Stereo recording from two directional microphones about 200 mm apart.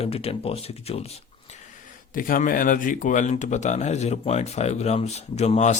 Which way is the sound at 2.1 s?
45° left (ahead or behind).